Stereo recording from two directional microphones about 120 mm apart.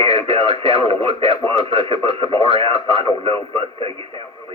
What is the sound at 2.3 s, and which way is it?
Speech, 30° left (ahead or behind).